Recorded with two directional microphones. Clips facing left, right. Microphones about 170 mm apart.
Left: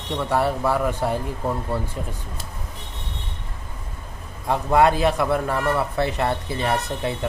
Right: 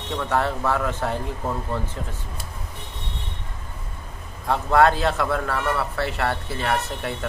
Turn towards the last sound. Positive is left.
turn(degrees=15)  # may be behind; listen again after turning